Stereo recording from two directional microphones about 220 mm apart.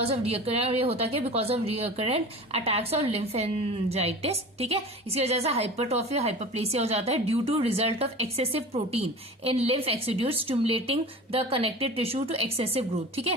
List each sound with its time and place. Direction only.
0.0 s a woman's voice: 25° right (ahead or behind)